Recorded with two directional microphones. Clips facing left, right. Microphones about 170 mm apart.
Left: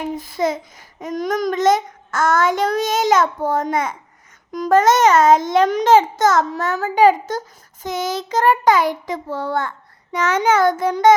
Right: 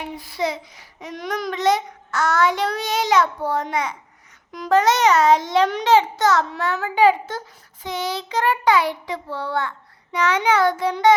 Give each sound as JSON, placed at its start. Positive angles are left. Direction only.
{"t": 0.0, "sound": "a child's voice", "side_deg": 45}